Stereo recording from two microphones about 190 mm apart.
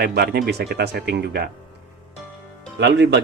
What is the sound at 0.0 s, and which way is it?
Speech, 55° right (ahead or behind).